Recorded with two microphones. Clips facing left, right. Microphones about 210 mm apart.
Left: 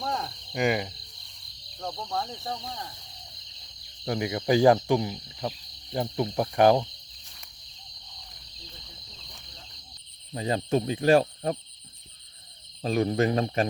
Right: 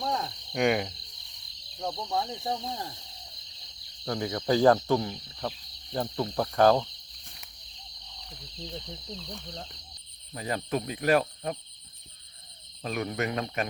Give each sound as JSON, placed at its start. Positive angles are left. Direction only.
{"t": 0.0, "sound": "cricket", "side_deg": 0}
{"t": 1.8, "sound": "speech", "side_deg": -10}
{"t": 4.0, "sound": "speech", "side_deg": 15}
{"t": 10.3, "sound": "speech", "side_deg": 25}
{"t": 12.8, "sound": "speech", "side_deg": 30}